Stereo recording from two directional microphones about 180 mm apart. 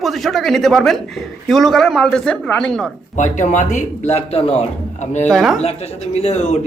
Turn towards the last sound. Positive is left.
turn(degrees=40)  # may be behind; listen again after turning